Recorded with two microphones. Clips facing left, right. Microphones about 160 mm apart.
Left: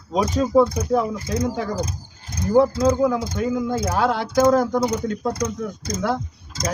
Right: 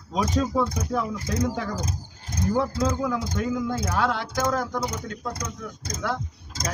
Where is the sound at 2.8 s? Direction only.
25° left (ahead or behind).